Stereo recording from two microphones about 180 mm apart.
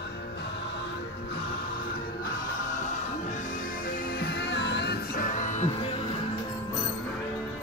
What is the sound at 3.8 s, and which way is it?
Music, 55° left (ahead or behind).